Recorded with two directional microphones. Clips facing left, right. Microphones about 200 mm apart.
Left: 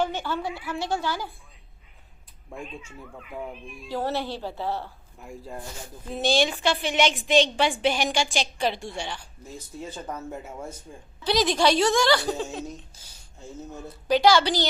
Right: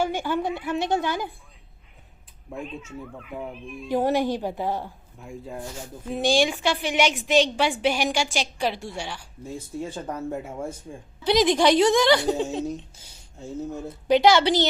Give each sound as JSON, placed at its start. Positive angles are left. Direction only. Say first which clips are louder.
{"t": 0.0, "sound": "a woman's voice", "louder": "right 3 dB", "side_deg": -10}
{"t": 2.5, "sound": "speech", "louder": "right 4 dB", "side_deg": 0}
{"t": 3.8, "sound": "a woman's voice", "louder": "right 6 dB", "side_deg": -15}
{"t": 6.1, "sound": "a woman's voice", "louder": "right 2 dB", "side_deg": -10}
{"t": 9.4, "sound": "a woman's voice", "louder": "right 10 dB", "side_deg": -30}
{"t": 10.1, "sound": "a woman's voice", "louder": "right 4 dB", "side_deg": -15}